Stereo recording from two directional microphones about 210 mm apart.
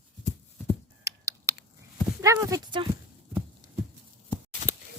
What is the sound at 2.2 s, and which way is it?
Clip-clop, 15° right (ahead or behind).